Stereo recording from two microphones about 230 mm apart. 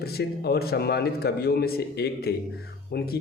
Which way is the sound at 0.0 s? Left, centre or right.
Left.